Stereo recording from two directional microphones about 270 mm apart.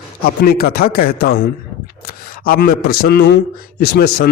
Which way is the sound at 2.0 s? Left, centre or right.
Left.